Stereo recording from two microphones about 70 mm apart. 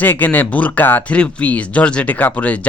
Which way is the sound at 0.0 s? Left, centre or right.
Left.